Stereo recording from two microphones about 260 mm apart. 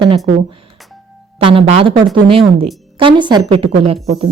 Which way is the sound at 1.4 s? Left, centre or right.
Centre.